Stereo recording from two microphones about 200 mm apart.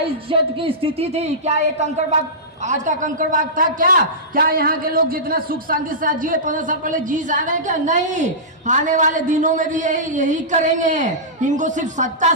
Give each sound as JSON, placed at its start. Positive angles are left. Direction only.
{"t": 0.3, "sound": "a man's voice", "side_deg": -25}